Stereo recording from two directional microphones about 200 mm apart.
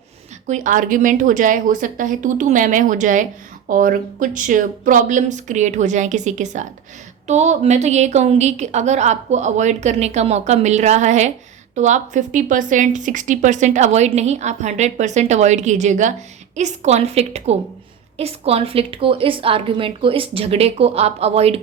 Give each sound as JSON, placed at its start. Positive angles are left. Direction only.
{"t": 0.4, "sound": "a woman's voice", "side_deg": -40}